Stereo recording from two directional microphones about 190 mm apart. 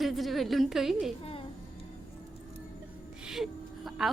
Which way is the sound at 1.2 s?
30° left (ahead or behind).